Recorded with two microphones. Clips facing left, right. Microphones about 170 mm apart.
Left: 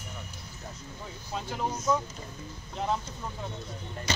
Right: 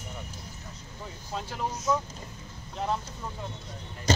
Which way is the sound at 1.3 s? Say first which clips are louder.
Left 1 dB; centre (ahead or behind).